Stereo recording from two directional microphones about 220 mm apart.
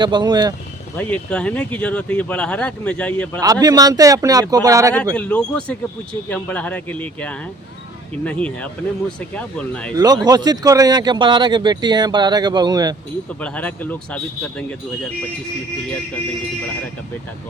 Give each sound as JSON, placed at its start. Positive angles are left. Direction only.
{"t": 0.0, "sound": "speech", "side_deg": -20}
{"t": 0.9, "sound": "speech", "side_deg": 5}
{"t": 3.4, "sound": "speech", "side_deg": -15}
{"t": 5.1, "sound": "speech", "side_deg": 5}
{"t": 10.0, "sound": "speech", "side_deg": -15}
{"t": 13.4, "sound": "speech", "side_deg": 5}